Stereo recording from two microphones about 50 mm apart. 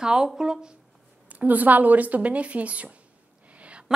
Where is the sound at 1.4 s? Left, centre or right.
Right.